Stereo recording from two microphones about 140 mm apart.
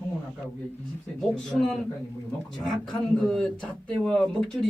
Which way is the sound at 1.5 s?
5° left (ahead or behind).